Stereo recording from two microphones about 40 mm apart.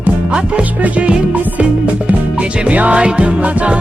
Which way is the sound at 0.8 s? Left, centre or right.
Right.